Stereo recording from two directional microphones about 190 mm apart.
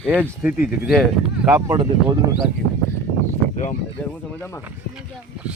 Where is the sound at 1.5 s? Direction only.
20° right (ahead or behind).